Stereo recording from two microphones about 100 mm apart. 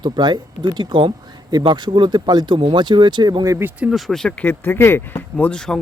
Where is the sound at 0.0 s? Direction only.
45° right (ahead or behind).